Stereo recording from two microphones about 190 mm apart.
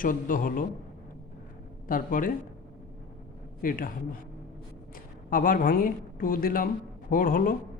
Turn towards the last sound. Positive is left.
turn(degrees=45)  # may be behind; listen again after turning